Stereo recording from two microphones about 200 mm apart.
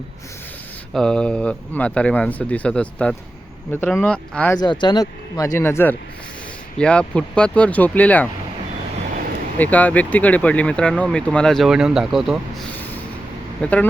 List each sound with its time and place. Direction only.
0.9 s speech: 5° left (ahead or behind)
4.6 s speech: 20° left (ahead or behind)
9.6 s speech: 10° left (ahead or behind)